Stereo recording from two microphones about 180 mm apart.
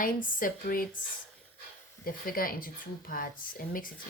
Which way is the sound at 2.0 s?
55° left (ahead or behind).